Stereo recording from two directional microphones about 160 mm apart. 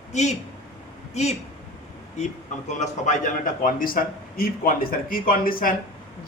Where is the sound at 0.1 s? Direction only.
45° left (ahead or behind).